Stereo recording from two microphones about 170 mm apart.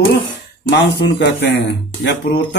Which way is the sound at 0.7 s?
90° left.